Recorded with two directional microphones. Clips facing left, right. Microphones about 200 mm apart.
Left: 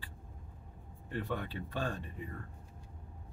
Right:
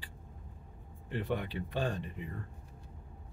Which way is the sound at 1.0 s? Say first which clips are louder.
Right 3 dB; 20° right (ahead or behind).